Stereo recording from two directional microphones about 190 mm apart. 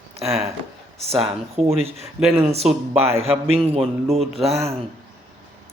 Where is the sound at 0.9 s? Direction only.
35° right (ahead or behind).